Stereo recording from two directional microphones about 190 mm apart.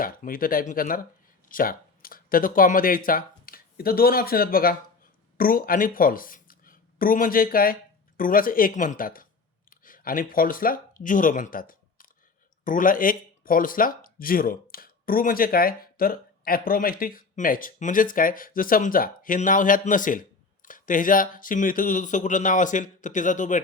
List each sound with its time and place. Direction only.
0.0 s speech: 50° left (ahead or behind)